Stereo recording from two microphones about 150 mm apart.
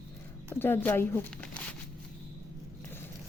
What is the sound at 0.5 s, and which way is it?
Speech, 15° left (ahead or behind).